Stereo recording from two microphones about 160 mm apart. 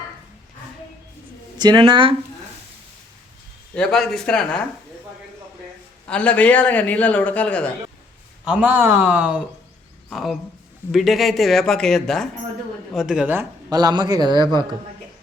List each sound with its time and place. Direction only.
1.5 s a man's voice: 30° right (ahead or behind)
3.8 s speech: 5° left (ahead or behind)
6.1 s a man's voice: 10° left (ahead or behind)
8.4 s speech: 10° right (ahead or behind)
13.7 s a man's voice: 25° right (ahead or behind)